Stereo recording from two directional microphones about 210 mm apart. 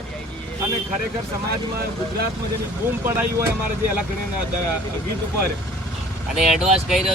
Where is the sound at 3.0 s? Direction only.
10° right (ahead or behind).